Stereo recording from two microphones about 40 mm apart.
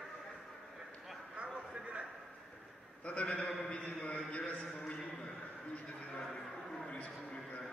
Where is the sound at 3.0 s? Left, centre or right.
Left.